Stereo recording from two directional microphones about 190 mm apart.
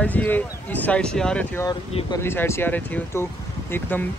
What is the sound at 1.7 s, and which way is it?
Speech, 25° left (ahead or behind).